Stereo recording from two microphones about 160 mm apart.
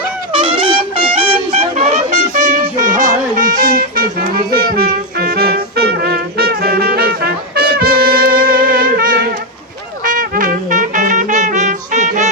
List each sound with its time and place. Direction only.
0.3 s music: 35° right (ahead or behind)